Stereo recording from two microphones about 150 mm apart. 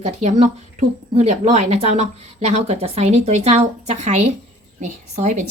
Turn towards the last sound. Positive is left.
turn(degrees=-55)  # may be behind; listen again after turning